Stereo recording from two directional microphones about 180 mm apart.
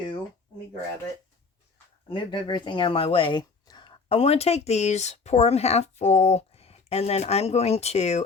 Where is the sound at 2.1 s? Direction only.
30° left (ahead or behind).